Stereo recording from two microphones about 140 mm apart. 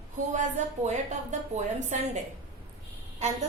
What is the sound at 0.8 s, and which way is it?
A woman's voice, 55° right (ahead or behind).